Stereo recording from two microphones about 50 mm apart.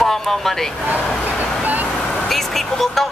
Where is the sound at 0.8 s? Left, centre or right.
Right.